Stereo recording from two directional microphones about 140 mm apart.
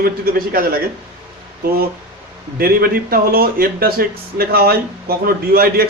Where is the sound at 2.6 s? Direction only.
90° right.